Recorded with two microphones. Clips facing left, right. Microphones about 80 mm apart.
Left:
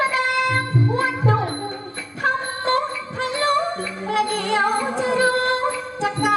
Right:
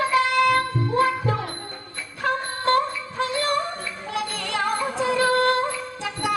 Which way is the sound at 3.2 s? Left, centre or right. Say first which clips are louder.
Left 1 dB; left.